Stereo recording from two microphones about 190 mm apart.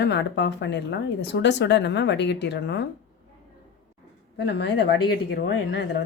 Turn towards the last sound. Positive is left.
turn(degrees=70)  # may be behind; listen again after turning